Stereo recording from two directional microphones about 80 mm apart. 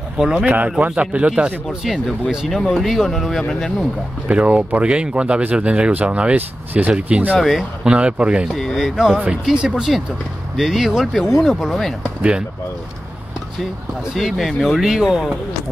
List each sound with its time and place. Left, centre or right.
0.2 s speech: centre
0.5 s speech: centre
1.9 s speech: centre
4.3 s speech: centre
7.3 s speech: centre
7.9 s speech: centre
8.5 s speech: centre
12.2 s speech: centre
14.1 s speech: centre